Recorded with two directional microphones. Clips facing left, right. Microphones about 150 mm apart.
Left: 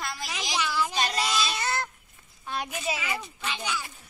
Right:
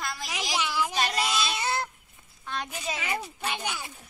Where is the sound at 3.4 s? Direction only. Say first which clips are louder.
Left 1 dB; 55° right (ahead or behind).